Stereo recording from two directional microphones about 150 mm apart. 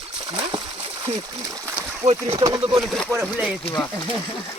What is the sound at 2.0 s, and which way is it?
Speech, 45° right (ahead or behind).